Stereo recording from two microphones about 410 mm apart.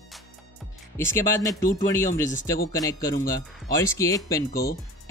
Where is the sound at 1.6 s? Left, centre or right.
Centre.